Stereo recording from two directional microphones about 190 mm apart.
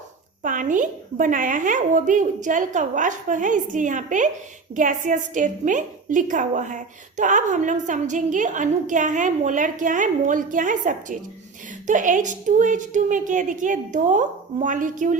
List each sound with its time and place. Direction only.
0.4 s a woman's voice: 45° right (ahead or behind)